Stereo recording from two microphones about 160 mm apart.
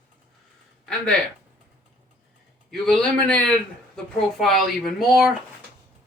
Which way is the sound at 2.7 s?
Centre (ahead or behind).